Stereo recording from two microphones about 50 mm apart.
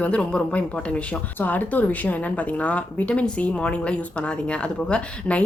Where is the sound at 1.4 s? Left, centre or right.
Left.